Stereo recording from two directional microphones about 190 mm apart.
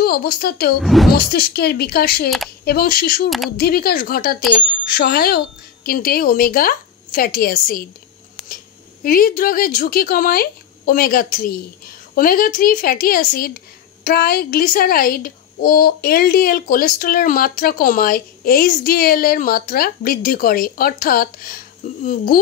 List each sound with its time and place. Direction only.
0.0 s a child's voice: 50° left (ahead or behind)
0.7 s speech: centre (ahead or behind)
1.1 s a child's voice: 55° left (ahead or behind)
3.3 s speech: centre (ahead or behind)
3.5 s a child's voice: 55° left (ahead or behind)
4.4 s speech: 5° left (ahead or behind)
4.8 s a child's voice: 55° left (ahead or behind)
9.0 s a child's voice: 50° left (ahead or behind)